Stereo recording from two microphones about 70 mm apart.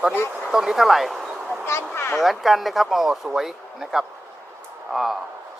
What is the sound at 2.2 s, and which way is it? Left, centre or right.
Speech, centre.